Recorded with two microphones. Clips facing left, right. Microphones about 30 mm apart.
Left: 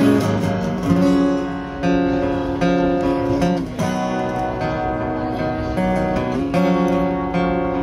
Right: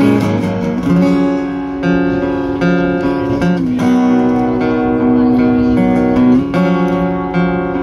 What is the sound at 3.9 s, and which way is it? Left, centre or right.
Music, centre.